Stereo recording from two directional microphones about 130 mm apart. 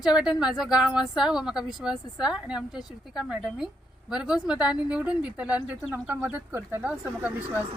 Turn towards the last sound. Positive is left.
turn(degrees=-15)  # may be behind; listen again after turning